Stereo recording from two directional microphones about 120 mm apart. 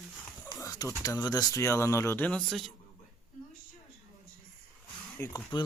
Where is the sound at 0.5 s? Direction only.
30° left (ahead or behind).